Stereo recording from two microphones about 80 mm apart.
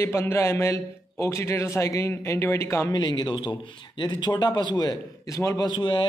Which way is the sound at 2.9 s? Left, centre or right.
Left.